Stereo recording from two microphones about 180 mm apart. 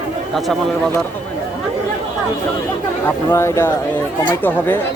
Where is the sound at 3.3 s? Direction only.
15° left (ahead or behind).